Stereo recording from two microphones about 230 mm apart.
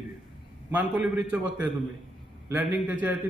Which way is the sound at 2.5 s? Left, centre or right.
Centre.